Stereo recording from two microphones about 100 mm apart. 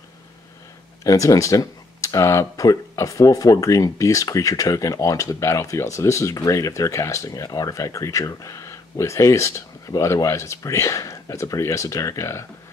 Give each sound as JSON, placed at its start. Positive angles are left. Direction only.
{"t": 1.0, "sound": "speech", "side_deg": 35}